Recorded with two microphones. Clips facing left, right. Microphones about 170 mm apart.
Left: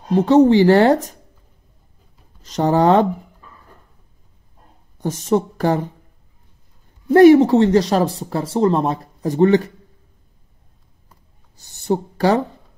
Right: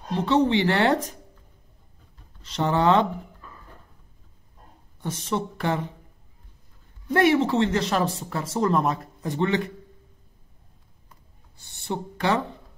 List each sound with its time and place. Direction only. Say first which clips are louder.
0.1 s speech: left 9 dB; 45° left (ahead or behind)
2.4 s speech: left 6 dB; 40° left (ahead or behind)
4.9 s speech: left 9 dB; 40° left (ahead or behind)
7.1 s speech: left 11 dB; 40° left (ahead or behind)
11.5 s a sound: left 10 dB; 40° left (ahead or behind)